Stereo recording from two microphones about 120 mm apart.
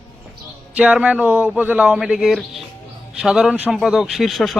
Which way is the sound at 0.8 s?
10° right (ahead or behind).